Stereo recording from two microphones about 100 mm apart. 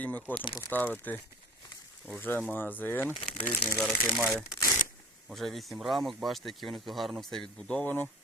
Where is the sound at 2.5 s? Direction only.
20° left (ahead or behind).